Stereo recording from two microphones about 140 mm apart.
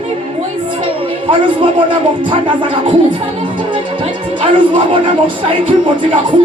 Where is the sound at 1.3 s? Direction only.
40° right (ahead or behind).